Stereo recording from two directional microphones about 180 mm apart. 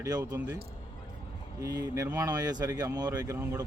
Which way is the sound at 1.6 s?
20° right (ahead or behind).